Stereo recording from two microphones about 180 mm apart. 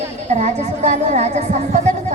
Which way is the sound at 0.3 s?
40° right (ahead or behind).